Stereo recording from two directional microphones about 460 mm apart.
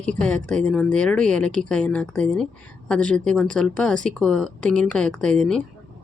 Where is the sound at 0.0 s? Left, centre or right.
Centre.